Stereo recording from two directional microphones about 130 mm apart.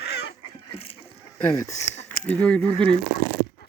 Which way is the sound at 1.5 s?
25° left (ahead or behind).